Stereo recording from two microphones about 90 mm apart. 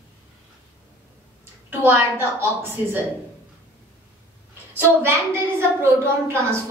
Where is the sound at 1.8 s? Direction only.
25° right (ahead or behind).